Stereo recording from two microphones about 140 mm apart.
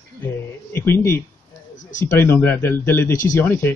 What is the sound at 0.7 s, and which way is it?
Speech, 15° left (ahead or behind).